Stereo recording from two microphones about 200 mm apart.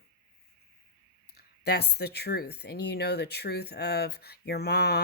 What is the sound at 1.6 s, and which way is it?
Speech, 55° left (ahead or behind).